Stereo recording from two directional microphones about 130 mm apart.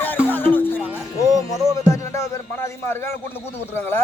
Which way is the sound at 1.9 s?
20° left (ahead or behind).